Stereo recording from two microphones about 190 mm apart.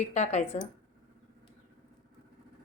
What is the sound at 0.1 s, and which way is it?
Speech, 35° left (ahead or behind).